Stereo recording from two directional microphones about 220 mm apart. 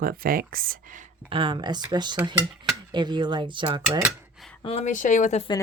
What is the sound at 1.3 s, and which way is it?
Speech, 20° right (ahead or behind).